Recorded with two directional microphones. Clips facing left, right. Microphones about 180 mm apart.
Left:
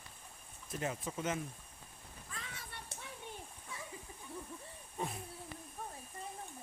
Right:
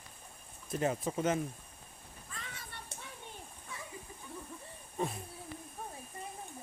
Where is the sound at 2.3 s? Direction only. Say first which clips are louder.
Right 1 dB; centre (ahead or behind).